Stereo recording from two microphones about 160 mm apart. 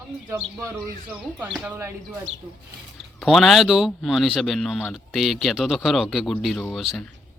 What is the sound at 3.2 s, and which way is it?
Speech, centre (ahead or behind).